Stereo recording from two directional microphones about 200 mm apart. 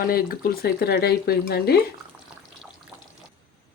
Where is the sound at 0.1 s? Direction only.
50° left (ahead or behind).